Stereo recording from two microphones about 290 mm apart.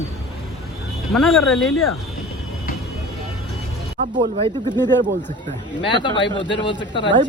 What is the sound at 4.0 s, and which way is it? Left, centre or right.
Speech, right.